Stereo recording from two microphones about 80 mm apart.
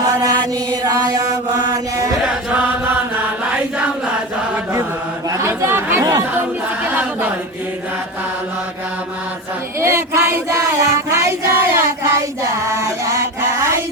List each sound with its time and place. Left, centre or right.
0.0 s chant: right
2.2 s chant: centre
5.4 s chatter: right
6.0 s chatter: right
6.8 s chant: centre
9.8 s child singing: right
12.6 s chant: right